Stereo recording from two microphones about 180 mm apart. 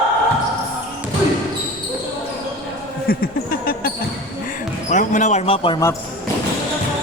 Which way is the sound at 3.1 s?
55° left (ahead or behind).